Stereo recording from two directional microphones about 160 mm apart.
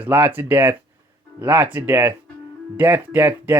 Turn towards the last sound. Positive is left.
turn(degrees=-10)  # may be behind; listen again after turning